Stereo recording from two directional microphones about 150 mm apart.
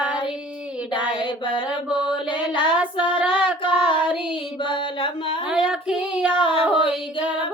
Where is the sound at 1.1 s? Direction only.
35° left (ahead or behind).